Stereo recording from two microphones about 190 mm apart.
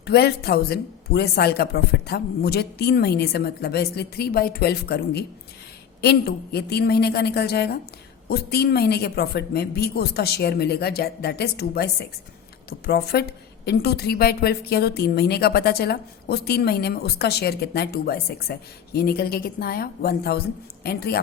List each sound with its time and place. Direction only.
0.0 s a woman's voice: 55° left (ahead or behind)